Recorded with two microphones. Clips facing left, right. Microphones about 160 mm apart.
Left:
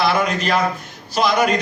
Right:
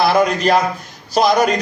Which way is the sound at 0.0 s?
40° right (ahead or behind).